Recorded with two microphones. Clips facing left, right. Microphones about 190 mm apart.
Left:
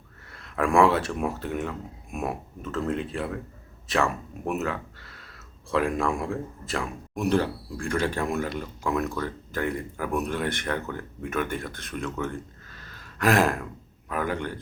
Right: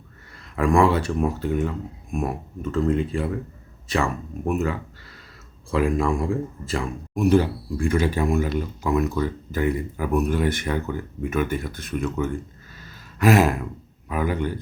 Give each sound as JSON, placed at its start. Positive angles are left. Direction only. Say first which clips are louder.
{"t": 0.3, "sound": "speech", "louder": "right 2 dB", "side_deg": 0}